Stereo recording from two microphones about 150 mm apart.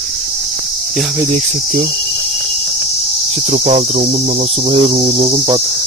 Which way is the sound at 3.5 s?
45° right (ahead or behind).